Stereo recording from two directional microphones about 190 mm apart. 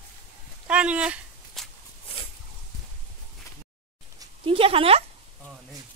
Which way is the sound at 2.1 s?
30° left (ahead or behind).